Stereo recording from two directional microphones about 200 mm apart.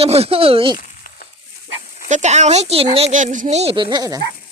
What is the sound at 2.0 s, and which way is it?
Speech, 35° right (ahead or behind).